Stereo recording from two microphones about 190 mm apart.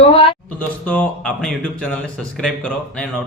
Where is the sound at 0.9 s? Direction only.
5° left (ahead or behind).